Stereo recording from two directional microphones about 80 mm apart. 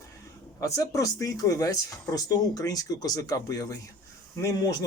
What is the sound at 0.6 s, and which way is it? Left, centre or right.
Speech, left.